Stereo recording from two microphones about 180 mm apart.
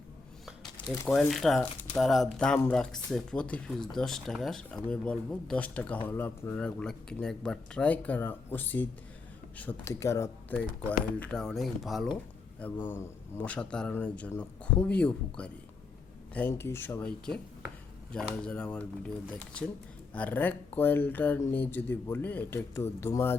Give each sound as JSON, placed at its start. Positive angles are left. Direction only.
{"t": 0.9, "sound": "speech", "side_deg": 0}
{"t": 12.8, "sound": "speech", "side_deg": 10}
{"t": 18.1, "sound": "speech", "side_deg": 5}
{"t": 20.1, "sound": "speech", "side_deg": 10}